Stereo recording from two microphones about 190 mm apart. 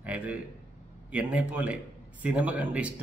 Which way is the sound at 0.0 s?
5° right (ahead or behind).